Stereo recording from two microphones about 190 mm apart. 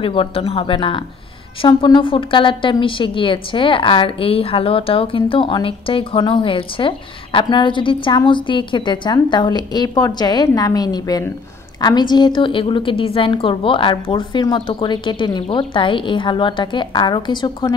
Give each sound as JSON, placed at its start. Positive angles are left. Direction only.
{"t": 0.0, "sound": "a woman's voice", "side_deg": 30}